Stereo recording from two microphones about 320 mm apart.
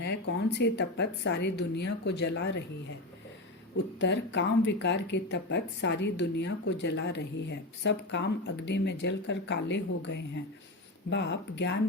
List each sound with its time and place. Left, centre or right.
0.0 s speech: left
4.0 s speech: left